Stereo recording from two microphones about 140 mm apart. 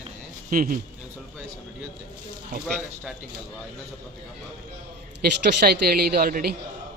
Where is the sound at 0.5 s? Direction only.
75° right (ahead or behind).